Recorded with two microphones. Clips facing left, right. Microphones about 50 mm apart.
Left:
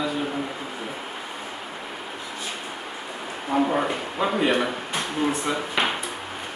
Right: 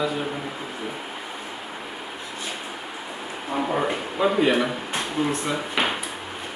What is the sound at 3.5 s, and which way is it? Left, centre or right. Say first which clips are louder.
Speech: left 2 dB; centre.